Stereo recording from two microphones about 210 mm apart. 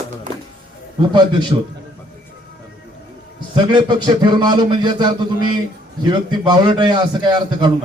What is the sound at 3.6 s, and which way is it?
A man's voice, 20° right (ahead or behind).